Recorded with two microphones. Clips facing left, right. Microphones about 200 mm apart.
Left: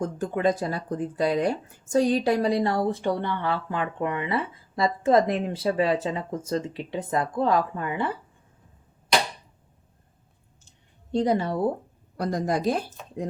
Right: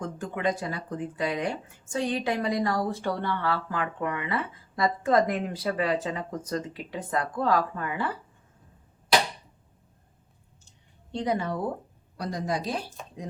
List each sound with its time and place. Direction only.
0.0 s speech: 35° left (ahead or behind)
11.1 s speech: 35° left (ahead or behind)
12.1 s a woman's voice: 50° left (ahead or behind)